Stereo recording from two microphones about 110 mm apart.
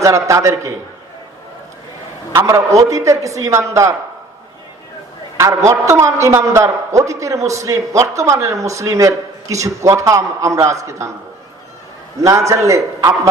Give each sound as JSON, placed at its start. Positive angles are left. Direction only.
{"t": 0.0, "sound": "a man's voice", "side_deg": -30}
{"t": 2.3, "sound": "a man's voice", "side_deg": -25}
{"t": 5.4, "sound": "a man's voice", "side_deg": -30}
{"t": 12.2, "sound": "a man's voice", "side_deg": -30}